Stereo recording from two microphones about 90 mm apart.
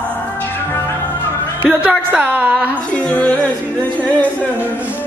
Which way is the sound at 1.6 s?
15° right (ahead or behind).